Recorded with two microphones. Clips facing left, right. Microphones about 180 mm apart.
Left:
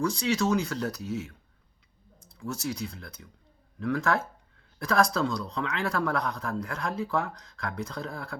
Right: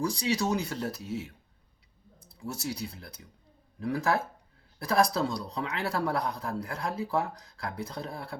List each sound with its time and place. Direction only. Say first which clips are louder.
0.0 s a man's voice: left 2 dB; 35° right (ahead or behind)
2.4 s a man's voice: left 2 dB; 35° right (ahead or behind)